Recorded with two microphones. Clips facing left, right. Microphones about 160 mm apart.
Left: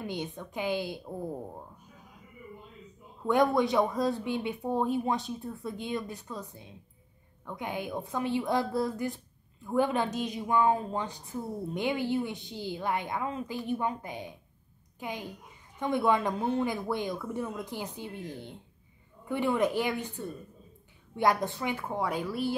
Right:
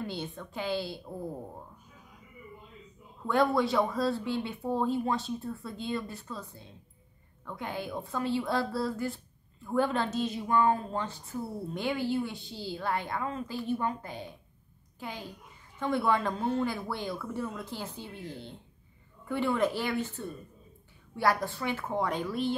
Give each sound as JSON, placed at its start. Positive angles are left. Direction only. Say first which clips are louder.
{"t": 0.0, "sound": "a woman's voice", "louder": "left 1 dB", "side_deg": 15}
{"t": 3.3, "sound": "a woman's voice", "louder": "left 1 dB", "side_deg": 20}
{"t": 21.2, "sound": "a woman's voice", "louder": "left 1 dB", "side_deg": 20}